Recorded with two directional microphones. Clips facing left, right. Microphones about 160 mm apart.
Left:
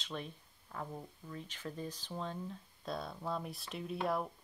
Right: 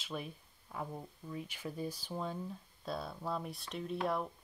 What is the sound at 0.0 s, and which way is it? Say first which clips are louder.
Speech: right 1 dB; 5° right (ahead or behind).